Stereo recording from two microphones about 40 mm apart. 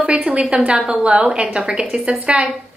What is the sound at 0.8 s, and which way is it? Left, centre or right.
Speech, centre.